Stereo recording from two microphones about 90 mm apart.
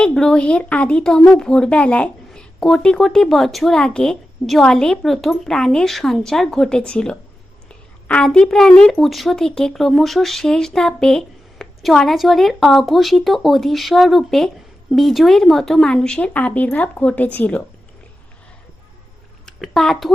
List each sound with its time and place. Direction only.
0.0 s a woman's voice: 5° left (ahead or behind)
19.5 s a woman's voice: 5° left (ahead or behind)